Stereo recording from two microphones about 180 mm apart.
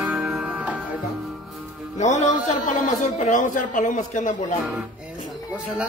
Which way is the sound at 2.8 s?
45° left (ahead or behind).